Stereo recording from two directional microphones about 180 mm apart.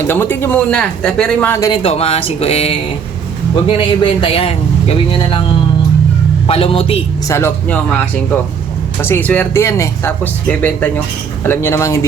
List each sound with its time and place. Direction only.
0.1 s speech: 10° left (ahead or behind)
1.8 s a man's voice: 35° left (ahead or behind)
6.5 s speech: 30° left (ahead or behind)
7.3 s speech: 15° left (ahead or behind)